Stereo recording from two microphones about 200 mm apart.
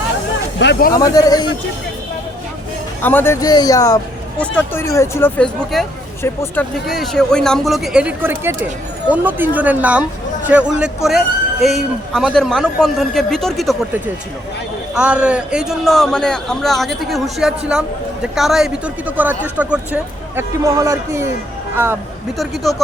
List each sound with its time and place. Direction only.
0.6 s speech: 60° left (ahead or behind)
0.9 s speech: 20° left (ahead or behind)
3.0 s speech: 10° left (ahead or behind)
6.8 s a man's voice: centre (ahead or behind)
22.4 s a man's voice: centre (ahead or behind)